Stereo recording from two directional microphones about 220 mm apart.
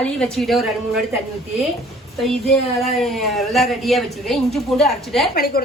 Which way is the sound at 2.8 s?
Centre (ahead or behind).